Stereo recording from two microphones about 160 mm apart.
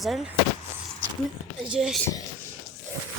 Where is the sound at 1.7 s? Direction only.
5° right (ahead or behind).